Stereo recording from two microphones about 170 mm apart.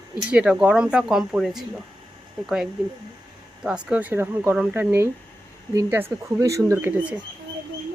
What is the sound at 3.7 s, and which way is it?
Speech, 5° right (ahead or behind).